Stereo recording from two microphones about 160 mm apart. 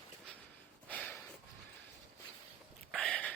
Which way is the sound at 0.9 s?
10° left (ahead or behind).